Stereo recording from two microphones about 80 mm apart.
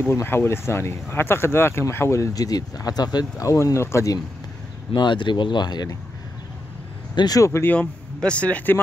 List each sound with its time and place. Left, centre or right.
0.0 s speech: left
3.6 s speech: left
4.9 s speech: left
7.2 s speech: left
7.6 s a man's voice: left